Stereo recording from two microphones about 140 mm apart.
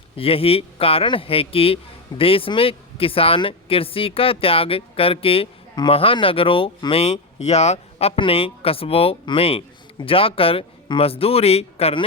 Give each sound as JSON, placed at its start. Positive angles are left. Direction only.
{"t": 0.2, "sound": "speech", "side_deg": 45}